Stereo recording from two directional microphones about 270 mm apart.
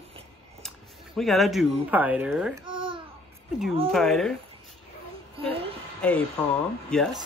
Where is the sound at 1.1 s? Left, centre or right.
Centre.